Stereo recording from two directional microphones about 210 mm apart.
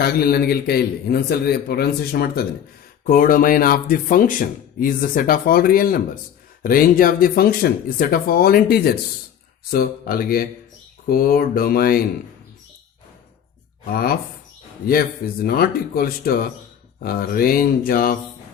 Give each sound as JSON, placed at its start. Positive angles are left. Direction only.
{"t": 0.0, "sound": "speech", "side_deg": 45}
{"t": 13.8, "sound": "speech", "side_deg": 45}
{"t": 15.4, "sound": "speech", "side_deg": 45}